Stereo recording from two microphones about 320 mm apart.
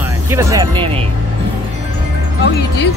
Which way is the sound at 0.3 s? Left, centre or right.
Centre.